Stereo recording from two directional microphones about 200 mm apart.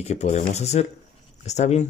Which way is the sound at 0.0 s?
35° left (ahead or behind).